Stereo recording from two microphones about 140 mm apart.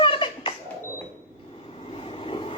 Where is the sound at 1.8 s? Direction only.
40° left (ahead or behind).